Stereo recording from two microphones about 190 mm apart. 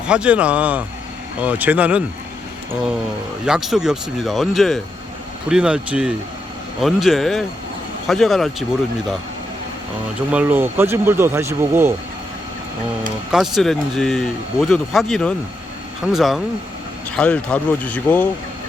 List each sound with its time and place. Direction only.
0.0 s speech: 5° right (ahead or behind)
3.4 s speech: centre (ahead or behind)
10.3 s speech: 10° right (ahead or behind)
13.3 s speech: centre (ahead or behind)